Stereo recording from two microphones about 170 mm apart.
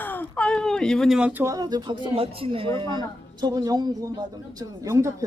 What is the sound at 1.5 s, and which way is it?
Speech, 25° right (ahead or behind).